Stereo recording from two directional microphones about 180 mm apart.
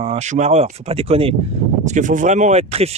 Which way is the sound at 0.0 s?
35° right (ahead or behind).